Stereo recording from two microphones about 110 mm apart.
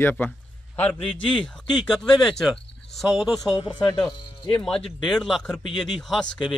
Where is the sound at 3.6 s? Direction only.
35° left (ahead or behind).